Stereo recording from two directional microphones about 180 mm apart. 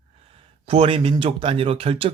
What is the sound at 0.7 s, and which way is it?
Speech, 30° right (ahead or behind).